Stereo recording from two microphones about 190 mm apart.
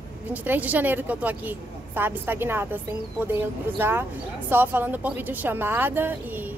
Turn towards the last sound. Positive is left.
turn(degrees=-10)  # may be behind; listen again after turning